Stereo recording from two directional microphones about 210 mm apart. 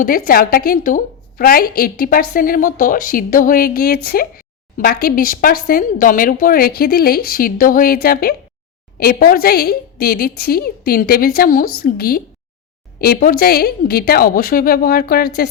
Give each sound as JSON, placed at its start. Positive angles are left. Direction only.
{"t": 0.0, "sound": "a woman's voice", "side_deg": 45}